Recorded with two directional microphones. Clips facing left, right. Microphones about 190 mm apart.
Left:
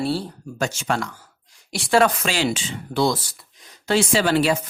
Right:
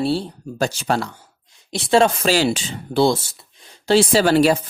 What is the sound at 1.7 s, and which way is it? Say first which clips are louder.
Speech: right 2 dB; 25° right (ahead or behind).